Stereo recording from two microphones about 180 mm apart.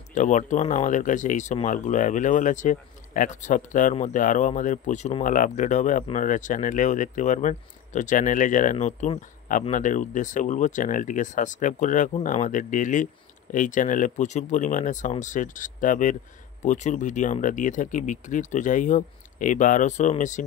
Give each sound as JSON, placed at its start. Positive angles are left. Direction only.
{"t": 0.1, "sound": "speech", "side_deg": 45}